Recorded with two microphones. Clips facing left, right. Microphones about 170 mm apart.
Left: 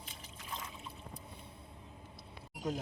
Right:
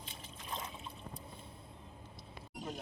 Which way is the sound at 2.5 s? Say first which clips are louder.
Left 6 dB; 90° left.